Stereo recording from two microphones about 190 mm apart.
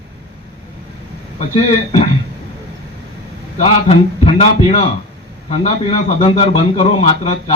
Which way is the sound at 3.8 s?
30° left (ahead or behind).